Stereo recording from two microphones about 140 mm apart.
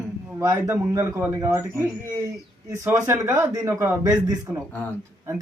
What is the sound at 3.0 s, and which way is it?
Speech, 20° right (ahead or behind).